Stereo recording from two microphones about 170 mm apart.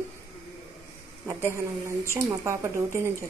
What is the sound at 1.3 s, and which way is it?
Speech, 15° right (ahead or behind).